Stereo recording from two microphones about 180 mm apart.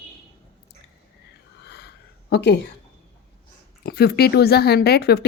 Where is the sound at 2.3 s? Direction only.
70° left (ahead or behind).